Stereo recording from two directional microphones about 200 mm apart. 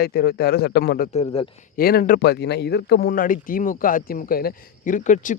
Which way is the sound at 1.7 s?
50° left (ahead or behind).